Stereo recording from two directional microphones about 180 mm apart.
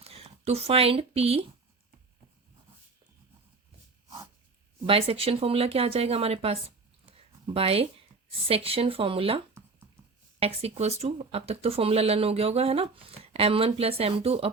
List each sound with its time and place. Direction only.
0.0 s speech: 35° right (ahead or behind)
4.9 s speech: 30° right (ahead or behind)
10.4 s speech: 35° right (ahead or behind)